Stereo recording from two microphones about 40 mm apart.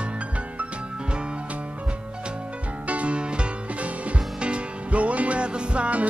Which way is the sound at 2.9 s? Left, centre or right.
Right.